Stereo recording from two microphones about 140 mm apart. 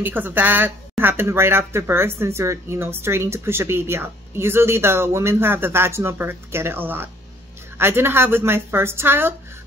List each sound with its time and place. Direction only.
0.0 s speech: 15° right (ahead or behind)